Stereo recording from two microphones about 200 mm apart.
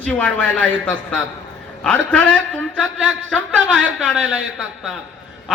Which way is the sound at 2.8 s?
75° right (ahead or behind).